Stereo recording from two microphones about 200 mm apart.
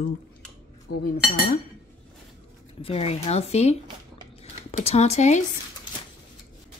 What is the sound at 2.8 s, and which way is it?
Speech, 30° left (ahead or behind).